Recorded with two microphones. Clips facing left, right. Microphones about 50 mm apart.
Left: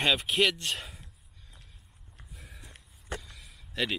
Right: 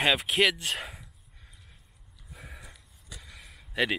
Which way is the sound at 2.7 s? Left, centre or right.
Left.